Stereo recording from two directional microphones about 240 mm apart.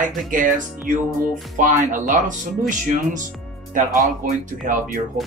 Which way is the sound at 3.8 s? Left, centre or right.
Right.